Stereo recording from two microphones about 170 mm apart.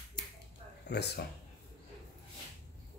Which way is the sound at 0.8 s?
75° left (ahead or behind).